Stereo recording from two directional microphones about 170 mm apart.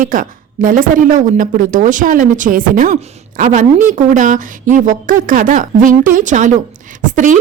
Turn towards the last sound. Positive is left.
turn(degrees=-50)  # may be behind; listen again after turning